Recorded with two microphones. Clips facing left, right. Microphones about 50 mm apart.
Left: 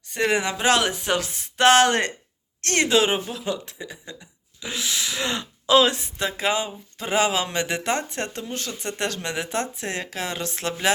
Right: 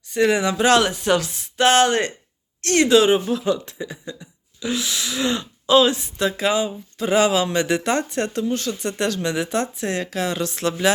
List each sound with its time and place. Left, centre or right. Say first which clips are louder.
0.1 s speech: right 4 dB; left
1.5 s speech: even; left
2.6 s speech: right 5 dB; left
3.2 s speech: right 7 dB; centre
4.6 s speech: right 3 dB; left
5.4 s speech: right 1 dB; left
6.1 s speech: right 6 dB; left